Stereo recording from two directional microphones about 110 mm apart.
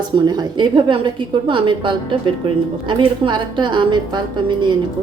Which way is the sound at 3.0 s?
45° right (ahead or behind).